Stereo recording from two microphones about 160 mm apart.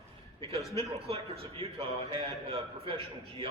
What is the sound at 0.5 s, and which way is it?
Speech, 20° left (ahead or behind).